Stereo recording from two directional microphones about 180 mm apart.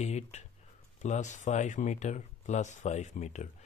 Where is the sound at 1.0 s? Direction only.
40° left (ahead or behind).